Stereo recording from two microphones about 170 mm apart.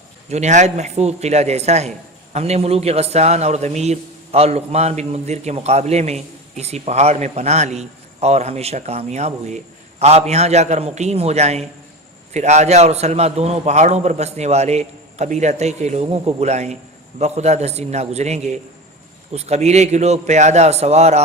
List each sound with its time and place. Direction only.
0.3 s a man's voice: 40° right (ahead or behind)